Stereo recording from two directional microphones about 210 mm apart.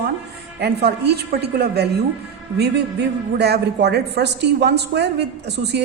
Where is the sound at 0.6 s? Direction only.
50° right (ahead or behind).